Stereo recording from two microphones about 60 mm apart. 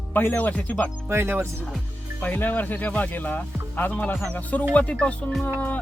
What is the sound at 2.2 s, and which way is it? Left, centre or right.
Speech, left.